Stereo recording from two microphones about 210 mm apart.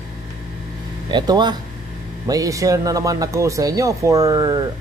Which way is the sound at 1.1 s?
20° right (ahead or behind).